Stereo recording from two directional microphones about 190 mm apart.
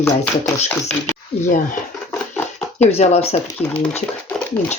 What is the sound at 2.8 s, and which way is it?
Speech, 35° left (ahead or behind).